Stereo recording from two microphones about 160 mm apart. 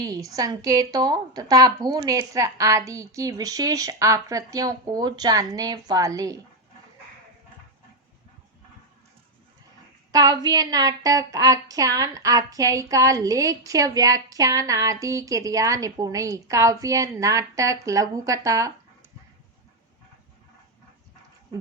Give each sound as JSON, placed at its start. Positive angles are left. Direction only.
{"t": 0.0, "sound": "a woman's voice", "side_deg": -20}
{"t": 10.1, "sound": "a woman's voice", "side_deg": -25}